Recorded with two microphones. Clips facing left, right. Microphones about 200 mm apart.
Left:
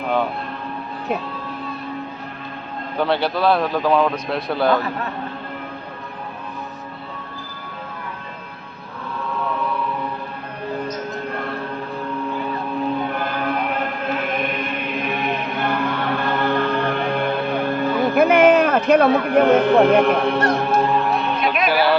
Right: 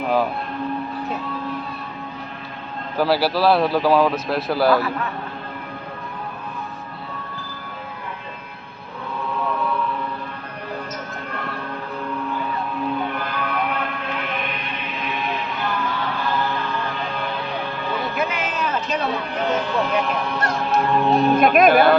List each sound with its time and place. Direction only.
3.0 s a man's voice: 5° right (ahead or behind)
13.4 s music: 45° left (ahead or behind)
21.1 s music: 40° right (ahead or behind)